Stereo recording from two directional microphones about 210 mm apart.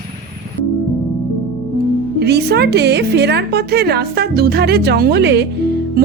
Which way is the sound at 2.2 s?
50° right (ahead or behind).